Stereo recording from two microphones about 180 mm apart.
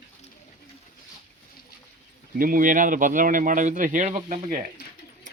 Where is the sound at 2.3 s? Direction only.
50° right (ahead or behind).